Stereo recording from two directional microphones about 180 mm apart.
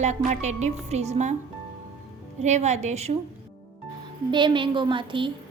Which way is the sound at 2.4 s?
40° right (ahead or behind).